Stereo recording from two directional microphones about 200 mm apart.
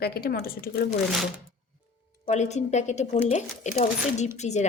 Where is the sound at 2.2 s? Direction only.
35° left (ahead or behind).